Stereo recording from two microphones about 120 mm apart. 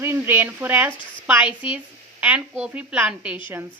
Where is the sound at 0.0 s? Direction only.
20° right (ahead or behind).